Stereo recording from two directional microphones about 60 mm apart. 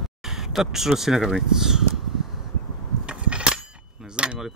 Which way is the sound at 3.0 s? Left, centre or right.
Centre.